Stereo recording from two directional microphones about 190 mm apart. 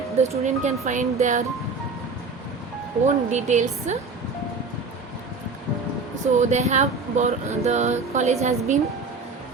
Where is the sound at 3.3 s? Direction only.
40° right (ahead or behind).